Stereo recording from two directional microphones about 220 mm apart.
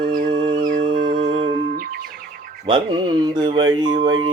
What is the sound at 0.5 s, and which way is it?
Music, 35° right (ahead or behind).